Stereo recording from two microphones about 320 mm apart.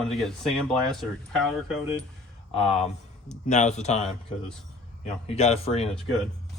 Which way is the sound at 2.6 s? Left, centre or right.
Centre.